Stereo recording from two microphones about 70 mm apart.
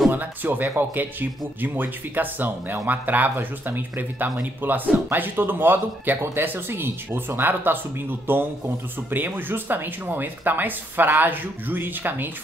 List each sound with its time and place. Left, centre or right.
0.1 s speech: right